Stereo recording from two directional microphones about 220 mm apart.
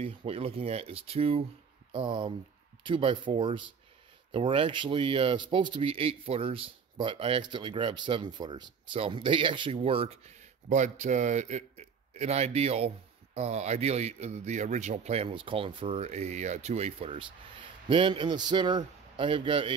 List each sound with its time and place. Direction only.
0.0 s a man's voice: 25° right (ahead or behind)